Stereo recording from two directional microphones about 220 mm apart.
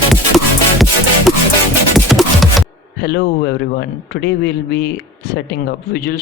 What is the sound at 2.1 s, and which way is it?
Music, centre (ahead or behind).